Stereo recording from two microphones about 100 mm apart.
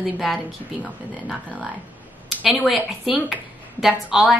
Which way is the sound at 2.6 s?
5° right (ahead or behind).